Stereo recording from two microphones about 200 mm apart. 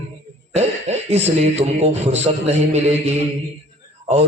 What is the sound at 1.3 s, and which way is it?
A man's voice, 35° right (ahead or behind).